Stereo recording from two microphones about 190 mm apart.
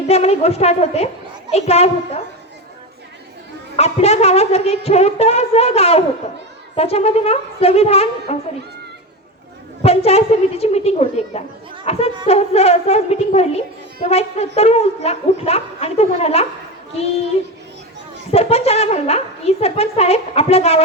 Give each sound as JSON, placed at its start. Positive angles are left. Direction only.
{"t": 0.1, "sound": "a woman's voice", "side_deg": 35}
{"t": 3.8, "sound": "a woman's voice", "side_deg": 35}
{"t": 9.8, "sound": "a woman's voice", "side_deg": 30}
{"t": 18.3, "sound": "a woman's voice", "side_deg": 30}